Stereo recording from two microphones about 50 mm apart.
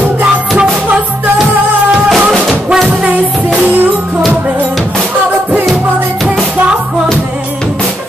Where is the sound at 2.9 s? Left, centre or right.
Right.